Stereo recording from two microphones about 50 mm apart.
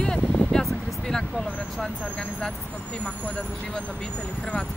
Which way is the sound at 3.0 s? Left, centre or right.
Left.